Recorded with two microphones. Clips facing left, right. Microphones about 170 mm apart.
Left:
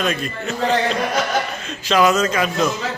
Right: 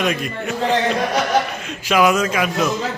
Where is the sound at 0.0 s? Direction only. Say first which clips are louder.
Right 1 dB; 15° right (ahead or behind).